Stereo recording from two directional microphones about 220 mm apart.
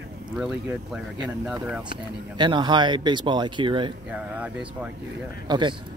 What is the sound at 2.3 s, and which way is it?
Speech, 20° right (ahead or behind).